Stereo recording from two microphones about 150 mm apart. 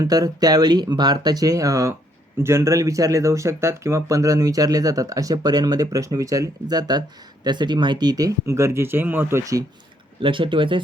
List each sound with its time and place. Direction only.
0.0 s speech: 25° right (ahead or behind)
10.2 s speech: 35° right (ahead or behind)